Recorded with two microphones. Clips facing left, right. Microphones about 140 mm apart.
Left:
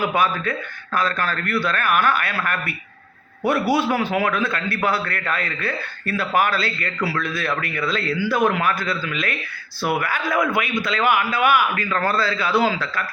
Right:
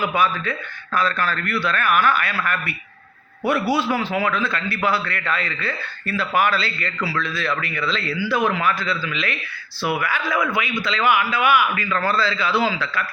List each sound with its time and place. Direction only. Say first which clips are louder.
0.0 s a man's voice: even; 50° left (ahead or behind)